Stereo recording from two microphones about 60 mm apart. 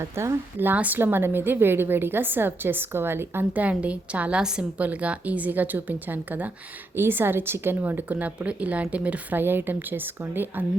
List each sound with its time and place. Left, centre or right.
0.0 s a woman's voice: right
0.6 s a woman's voice: right
3.5 s a woman's voice: right
4.8 s a woman's voice: right
9.4 s a woman's voice: right